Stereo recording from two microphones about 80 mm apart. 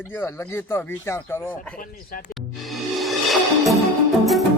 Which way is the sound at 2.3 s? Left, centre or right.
Centre.